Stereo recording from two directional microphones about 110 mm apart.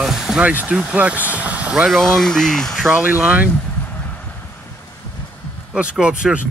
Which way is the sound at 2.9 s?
10° right (ahead or behind).